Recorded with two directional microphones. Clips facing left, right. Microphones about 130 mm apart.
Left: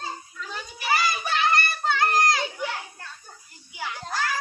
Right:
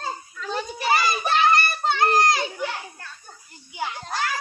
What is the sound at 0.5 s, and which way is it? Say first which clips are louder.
Children playing: right 4 dB; 30° right (ahead or behind).